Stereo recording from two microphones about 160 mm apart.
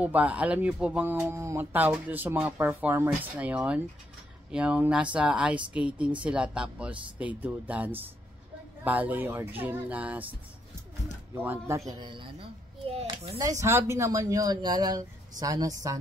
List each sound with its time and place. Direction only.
0.0 s speech: 10° right (ahead or behind)
11.4 s speech: 15° right (ahead or behind)
11.9 s a child's voice: 30° right (ahead or behind)
13.4 s speech: 20° right (ahead or behind)